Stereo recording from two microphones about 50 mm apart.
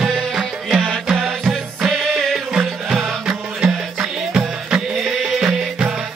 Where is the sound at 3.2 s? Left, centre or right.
Centre.